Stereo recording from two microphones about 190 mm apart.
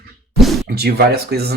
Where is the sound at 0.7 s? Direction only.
55° right (ahead or behind).